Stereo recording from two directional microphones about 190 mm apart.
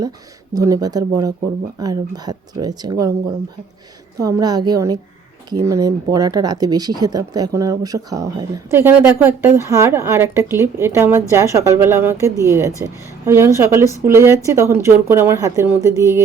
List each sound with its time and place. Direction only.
0.5 s speech: 20° right (ahead or behind)
4.2 s speech: 20° right (ahead or behind)